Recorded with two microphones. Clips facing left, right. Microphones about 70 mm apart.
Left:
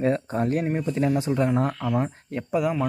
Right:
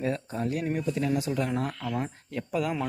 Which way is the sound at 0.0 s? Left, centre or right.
Left.